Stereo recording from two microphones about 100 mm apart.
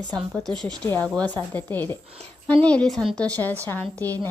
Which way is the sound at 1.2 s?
20° left (ahead or behind).